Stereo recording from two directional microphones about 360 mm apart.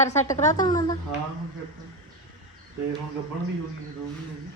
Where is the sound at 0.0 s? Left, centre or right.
Centre.